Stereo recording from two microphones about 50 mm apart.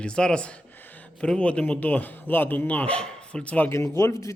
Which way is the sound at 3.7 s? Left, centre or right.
Left.